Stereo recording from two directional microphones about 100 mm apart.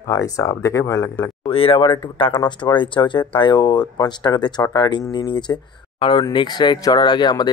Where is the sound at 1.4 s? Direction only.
70° left (ahead or behind).